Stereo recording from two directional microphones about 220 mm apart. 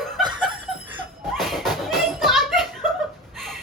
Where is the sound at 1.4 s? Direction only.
Centre (ahead or behind).